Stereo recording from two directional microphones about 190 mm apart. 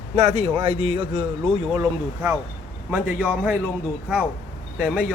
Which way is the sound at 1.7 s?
20° right (ahead or behind).